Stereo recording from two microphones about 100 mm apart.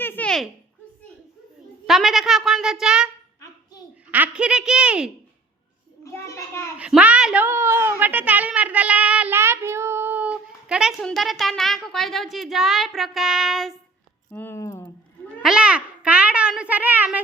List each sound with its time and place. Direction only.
0.0 s a sound: 20° left (ahead or behind)
1.9 s a woman's voice: 5° right (ahead or behind)
4.1 s speech: 15° right (ahead or behind)
6.0 s a child's voice: 30° left (ahead or behind)
6.7 s speech: 10° right (ahead or behind)
7.4 s child singing: 25° right (ahead or behind)
9.3 s child singing: 25° right (ahead or behind); by 11.0 s 5° right (ahead or behind)
11.0 s a woman's voice: centre (ahead or behind)
14.3 s speech: 20° left (ahead or behind)
15.4 s a child's voice: 5° right (ahead or behind)